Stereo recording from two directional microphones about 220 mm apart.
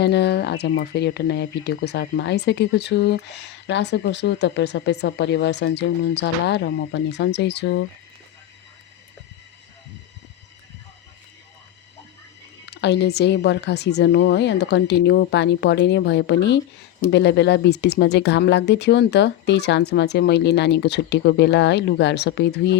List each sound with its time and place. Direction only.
0.0 s speech: 50° left (ahead or behind)
12.6 s speech: 50° left (ahead or behind)